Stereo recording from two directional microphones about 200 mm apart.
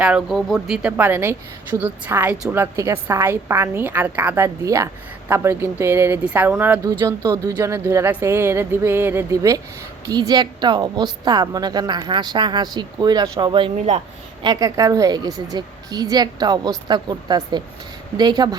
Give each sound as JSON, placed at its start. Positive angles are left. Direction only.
{"t": 0.0, "sound": "a woman's voice", "side_deg": -5}